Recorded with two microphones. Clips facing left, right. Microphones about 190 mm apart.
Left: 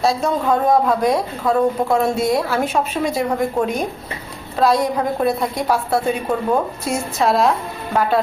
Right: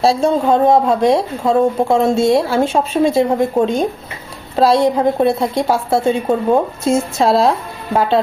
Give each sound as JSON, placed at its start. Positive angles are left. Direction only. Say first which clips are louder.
{"t": 0.0, "sound": "speech", "louder": "right 5 dB", "side_deg": -30}